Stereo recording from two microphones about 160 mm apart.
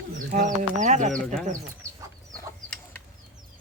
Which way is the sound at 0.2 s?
55° right (ahead or behind).